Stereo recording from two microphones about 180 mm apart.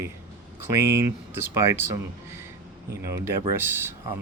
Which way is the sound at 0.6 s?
15° right (ahead or behind).